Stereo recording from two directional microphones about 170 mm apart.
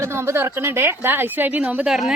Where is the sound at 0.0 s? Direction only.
15° right (ahead or behind).